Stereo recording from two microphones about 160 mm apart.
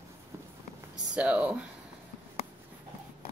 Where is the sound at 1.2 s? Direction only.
10° right (ahead or behind).